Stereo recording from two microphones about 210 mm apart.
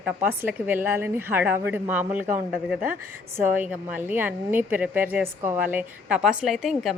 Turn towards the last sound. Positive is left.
turn(degrees=0)  # may be behind; listen again after turning